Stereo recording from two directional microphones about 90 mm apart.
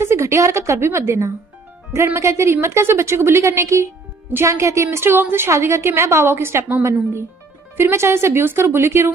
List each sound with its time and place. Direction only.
0.0 s a woman's voice: 30° right (ahead or behind)